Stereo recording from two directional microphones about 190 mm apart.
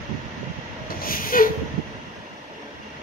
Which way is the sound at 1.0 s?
50° left (ahead or behind).